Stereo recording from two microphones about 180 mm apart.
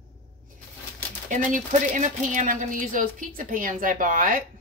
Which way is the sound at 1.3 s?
45° right (ahead or behind).